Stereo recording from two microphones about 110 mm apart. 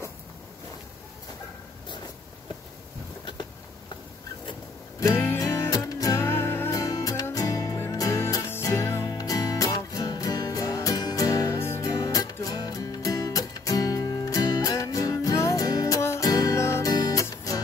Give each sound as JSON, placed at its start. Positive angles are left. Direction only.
{"t": 5.0, "sound": "music", "side_deg": 20}
{"t": 6.8, "sound": "music", "side_deg": 30}